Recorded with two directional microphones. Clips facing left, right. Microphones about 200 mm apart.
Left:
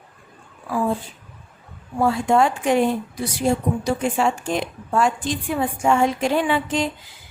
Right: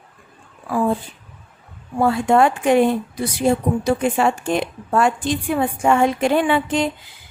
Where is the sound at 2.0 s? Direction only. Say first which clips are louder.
Right 2 dB; 60° right (ahead or behind).